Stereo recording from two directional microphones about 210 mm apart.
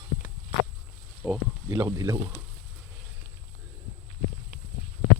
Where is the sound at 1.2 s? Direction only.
10° right (ahead or behind).